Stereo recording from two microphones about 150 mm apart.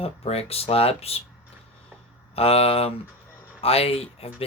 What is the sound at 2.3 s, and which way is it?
Speech, 40° left (ahead or behind).